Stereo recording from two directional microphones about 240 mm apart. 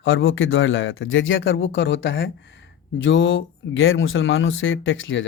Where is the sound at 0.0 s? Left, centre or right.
Left.